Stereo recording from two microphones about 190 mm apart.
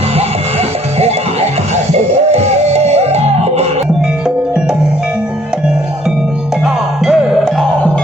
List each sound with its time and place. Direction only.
0.9 s music: 35° right (ahead or behind)
6.7 s music: centre (ahead or behind)